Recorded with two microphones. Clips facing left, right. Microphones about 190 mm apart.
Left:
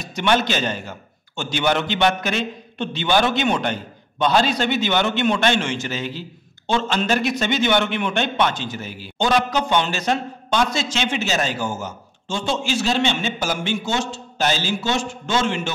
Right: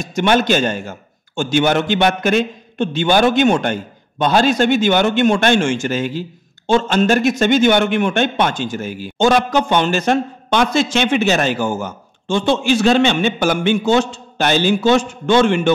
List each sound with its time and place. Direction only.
0.0 s a man's voice: 45° right (ahead or behind)